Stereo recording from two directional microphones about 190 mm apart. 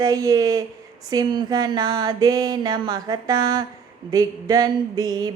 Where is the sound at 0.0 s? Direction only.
20° right (ahead or behind).